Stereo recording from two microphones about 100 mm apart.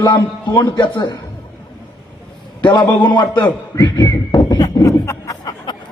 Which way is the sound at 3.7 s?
40° left (ahead or behind).